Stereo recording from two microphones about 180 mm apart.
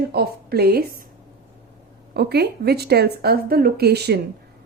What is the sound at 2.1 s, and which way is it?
Speech, 65° right (ahead or behind).